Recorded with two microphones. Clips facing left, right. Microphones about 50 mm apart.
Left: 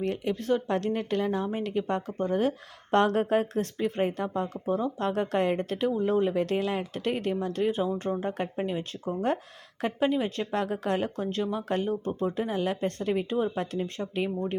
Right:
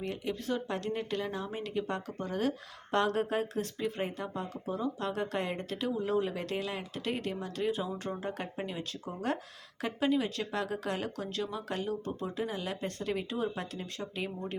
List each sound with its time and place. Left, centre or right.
0.0 s speech: left